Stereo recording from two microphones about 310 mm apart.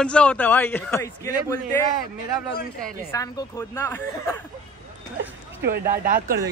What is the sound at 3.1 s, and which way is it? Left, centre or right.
Speech, centre.